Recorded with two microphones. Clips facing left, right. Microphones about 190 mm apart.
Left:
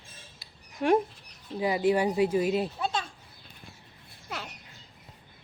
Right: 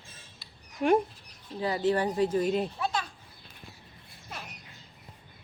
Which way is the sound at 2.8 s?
25° left (ahead or behind).